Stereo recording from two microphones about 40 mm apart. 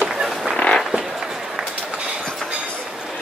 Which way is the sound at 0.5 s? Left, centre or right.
Left.